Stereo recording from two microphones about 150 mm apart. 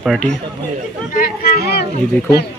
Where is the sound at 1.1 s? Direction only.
80° left.